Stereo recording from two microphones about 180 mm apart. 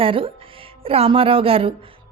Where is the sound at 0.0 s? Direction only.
30° right (ahead or behind).